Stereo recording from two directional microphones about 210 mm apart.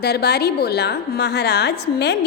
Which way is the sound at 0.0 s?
50° left (ahead or behind).